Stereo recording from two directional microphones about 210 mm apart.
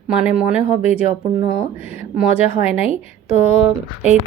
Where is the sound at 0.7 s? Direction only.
30° left (ahead or behind).